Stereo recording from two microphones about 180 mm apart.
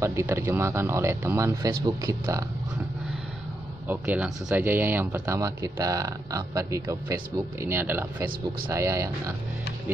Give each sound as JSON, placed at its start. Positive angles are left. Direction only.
{"t": 0.0, "sound": "speech", "side_deg": -15}
{"t": 3.8, "sound": "speech", "side_deg": -10}